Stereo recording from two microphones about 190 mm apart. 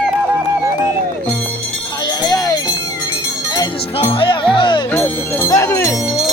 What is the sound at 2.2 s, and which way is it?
Music, 20° left (ahead or behind).